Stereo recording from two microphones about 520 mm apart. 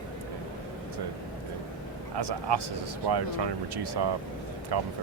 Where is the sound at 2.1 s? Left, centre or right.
Right.